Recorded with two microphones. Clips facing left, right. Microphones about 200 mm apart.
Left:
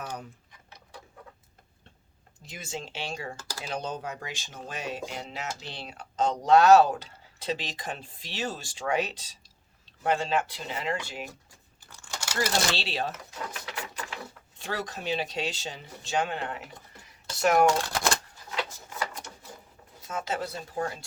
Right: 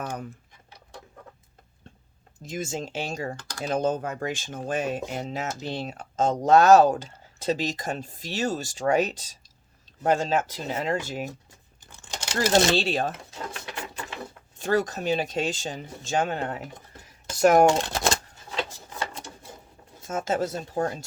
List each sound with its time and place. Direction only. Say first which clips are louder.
0.0 s a sound: right 5 dB; 50° right (ahead or behind)
2.4 s speech: right 7 dB; 45° right (ahead or behind)
3.3 s speech: even; 10° left (ahead or behind)
3.6 s speech: right 9 dB; 45° right (ahead or behind)
11.8 s crumpling: right 2 dB; 20° right (ahead or behind)
12.7 s speech: right 8 dB; 45° right (ahead or behind)
14.6 s speech: right 9 dB; 45° right (ahead or behind)
17.7 s shuffling cards: right 3 dB; 20° right (ahead or behind)
20.1 s speech: right 6 dB; 45° right (ahead or behind)